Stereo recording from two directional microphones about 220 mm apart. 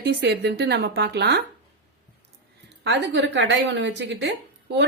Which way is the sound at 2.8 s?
50° right (ahead or behind).